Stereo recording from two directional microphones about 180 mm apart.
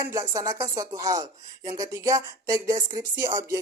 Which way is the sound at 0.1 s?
20° right (ahead or behind).